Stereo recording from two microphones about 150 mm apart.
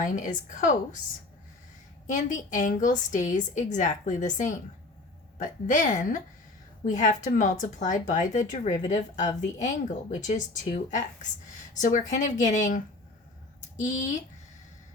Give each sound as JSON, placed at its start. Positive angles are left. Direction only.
{"t": 0.0, "sound": "speech", "side_deg": 60}
{"t": 2.0, "sound": "speech", "side_deg": 55}
{"t": 11.8, "sound": "speech", "side_deg": 55}
{"t": 13.8, "sound": "speech", "side_deg": 55}